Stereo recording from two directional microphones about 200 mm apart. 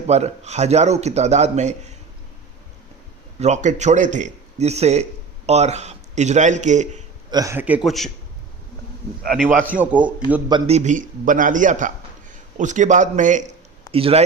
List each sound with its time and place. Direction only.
0.1 s a man's voice: 35° right (ahead or behind)
3.4 s a man's voice: 35° right (ahead or behind)
7.3 s speech: 15° right (ahead or behind); by 8.1 s centre (ahead or behind)
9.2 s a man's voice: centre (ahead or behind)
10.5 s a man's voice: 30° right (ahead or behind)